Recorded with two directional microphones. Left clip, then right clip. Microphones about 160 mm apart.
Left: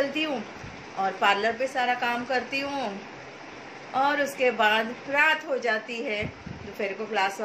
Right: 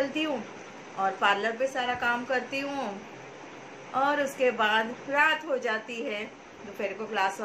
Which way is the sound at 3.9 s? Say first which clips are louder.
Left 2 dB; 5° left (ahead or behind).